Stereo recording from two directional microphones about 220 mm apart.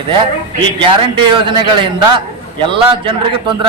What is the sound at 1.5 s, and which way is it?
A man's voice, 20° right (ahead or behind).